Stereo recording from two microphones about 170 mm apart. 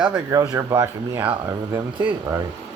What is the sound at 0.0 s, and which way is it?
Speech, 15° right (ahead or behind).